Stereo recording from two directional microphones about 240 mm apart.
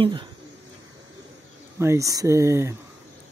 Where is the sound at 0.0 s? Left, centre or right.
Centre.